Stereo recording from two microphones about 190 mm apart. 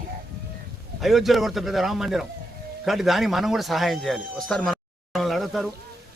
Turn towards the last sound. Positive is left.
turn(degrees=0)  # may be behind; listen again after turning